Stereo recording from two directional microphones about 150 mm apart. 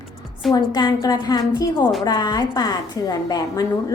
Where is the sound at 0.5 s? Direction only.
25° left (ahead or behind).